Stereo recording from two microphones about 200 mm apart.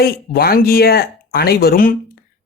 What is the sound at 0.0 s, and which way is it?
Speech, 50° left (ahead or behind).